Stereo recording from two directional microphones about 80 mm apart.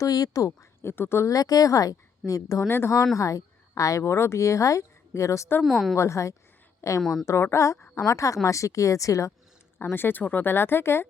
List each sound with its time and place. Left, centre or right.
0.0 s speech: left
1.3 s a woman's voice: left
2.6 s speech: left
3.2 s speech: left
5.6 s a woman's voice: centre
6.0 s speech: left
7.0 s a woman's voice: centre
7.3 s a woman's voice: left
9.8 s speech: left